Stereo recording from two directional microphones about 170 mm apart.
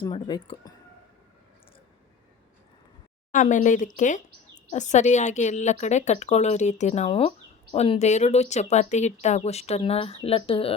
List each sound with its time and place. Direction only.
0.0 s speech: 25° left (ahead or behind)
3.3 s a woman's voice: 50° left (ahead or behind)